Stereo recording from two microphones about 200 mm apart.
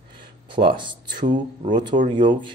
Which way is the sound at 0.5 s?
25° right (ahead or behind).